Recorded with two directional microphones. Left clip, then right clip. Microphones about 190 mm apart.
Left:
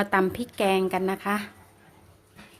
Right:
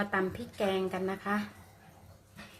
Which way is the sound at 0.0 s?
55° left (ahead or behind).